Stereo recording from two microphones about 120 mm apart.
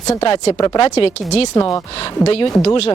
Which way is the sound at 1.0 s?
55° left (ahead or behind).